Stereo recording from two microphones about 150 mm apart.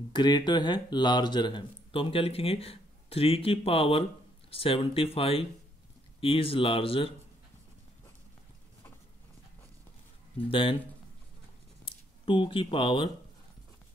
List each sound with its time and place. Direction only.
0.1 s speech: 30° left (ahead or behind)
10.3 s speech: 35° left (ahead or behind)
11.8 s speech: 35° left (ahead or behind)